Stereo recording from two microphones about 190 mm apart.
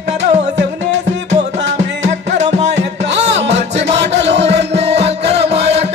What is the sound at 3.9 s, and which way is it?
Music, 65° right (ahead or behind).